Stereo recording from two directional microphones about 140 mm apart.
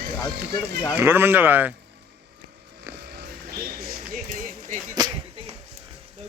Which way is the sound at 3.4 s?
90° right.